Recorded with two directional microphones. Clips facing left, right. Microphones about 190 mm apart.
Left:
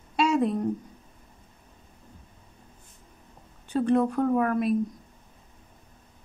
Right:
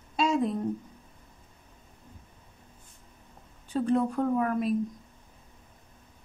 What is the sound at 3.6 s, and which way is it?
Speech, 70° left (ahead or behind).